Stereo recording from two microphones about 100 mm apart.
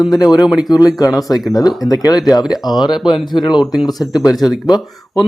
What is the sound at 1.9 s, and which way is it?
Speech, 40° left (ahead or behind).